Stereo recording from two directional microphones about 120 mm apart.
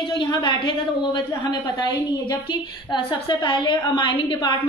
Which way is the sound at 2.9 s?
40° left (ahead or behind).